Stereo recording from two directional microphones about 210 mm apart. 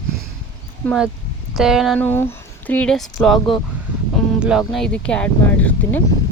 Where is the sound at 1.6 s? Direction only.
Centre (ahead or behind).